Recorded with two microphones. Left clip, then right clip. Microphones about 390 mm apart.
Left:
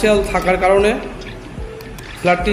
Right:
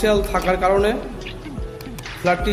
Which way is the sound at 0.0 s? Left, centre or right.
Right.